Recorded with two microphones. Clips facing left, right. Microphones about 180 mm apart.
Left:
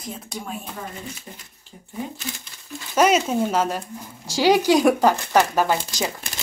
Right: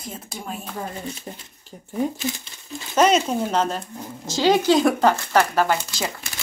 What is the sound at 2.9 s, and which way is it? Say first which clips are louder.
Speech: even; 10° left (ahead or behind).